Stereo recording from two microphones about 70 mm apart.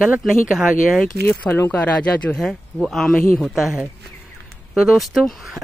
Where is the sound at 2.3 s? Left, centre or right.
Centre.